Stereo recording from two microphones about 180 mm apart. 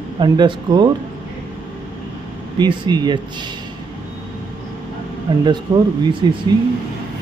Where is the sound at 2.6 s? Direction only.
25° right (ahead or behind).